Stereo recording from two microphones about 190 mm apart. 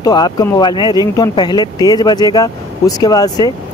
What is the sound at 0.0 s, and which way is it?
Speech, 20° left (ahead or behind).